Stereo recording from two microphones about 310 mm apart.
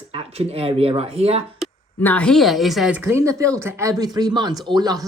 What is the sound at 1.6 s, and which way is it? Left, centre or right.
Speech, centre.